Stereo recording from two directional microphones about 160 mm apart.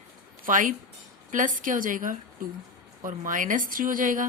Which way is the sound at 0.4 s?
55° right (ahead or behind).